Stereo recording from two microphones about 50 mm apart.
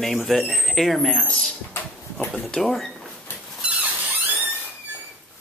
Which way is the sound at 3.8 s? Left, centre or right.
Right.